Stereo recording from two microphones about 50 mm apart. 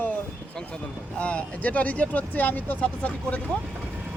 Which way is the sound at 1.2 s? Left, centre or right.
Left.